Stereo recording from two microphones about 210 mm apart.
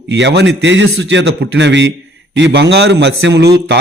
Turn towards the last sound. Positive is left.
turn(degrees=-50)  # may be behind; listen again after turning